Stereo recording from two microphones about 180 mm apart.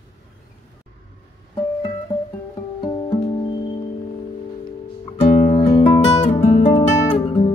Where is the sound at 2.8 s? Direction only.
25° left (ahead or behind).